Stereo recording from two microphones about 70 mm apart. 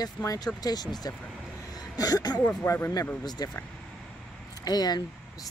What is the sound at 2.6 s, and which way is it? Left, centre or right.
Speech, left.